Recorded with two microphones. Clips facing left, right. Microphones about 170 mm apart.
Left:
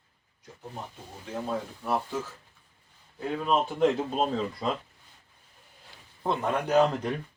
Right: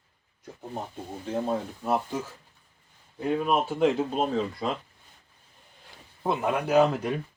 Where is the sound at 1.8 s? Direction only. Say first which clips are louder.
Right 1 dB; 20° right (ahead or behind); by 4.7 s centre (ahead or behind).